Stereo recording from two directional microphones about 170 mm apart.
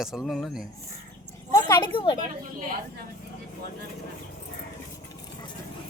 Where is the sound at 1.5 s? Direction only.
20° left (ahead or behind).